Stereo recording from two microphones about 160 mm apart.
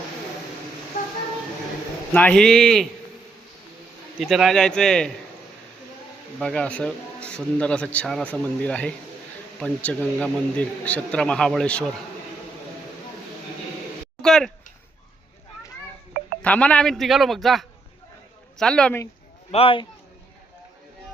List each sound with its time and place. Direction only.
2.1 s a man's voice: 5° left (ahead or behind)
4.2 s a man's voice: centre (ahead or behind)
6.4 s a man's voice: 5° left (ahead or behind)
14.2 s a sound: centre (ahead or behind)
16.4 s a man's voice: 10° left (ahead or behind)
19.5 s speech: 35° left (ahead or behind)